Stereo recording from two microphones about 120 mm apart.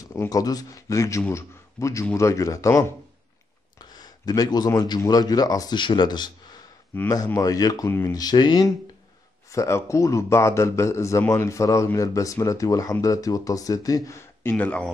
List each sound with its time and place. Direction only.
0.1 s a man's voice: 25° left (ahead or behind)
7.3 s a man's voice: 30° left (ahead or behind)
9.5 s a man's voice: 25° left (ahead or behind)
14.5 s speech: 10° left (ahead or behind)